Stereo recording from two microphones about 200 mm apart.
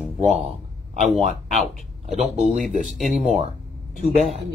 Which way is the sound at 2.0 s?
35° right (ahead or behind).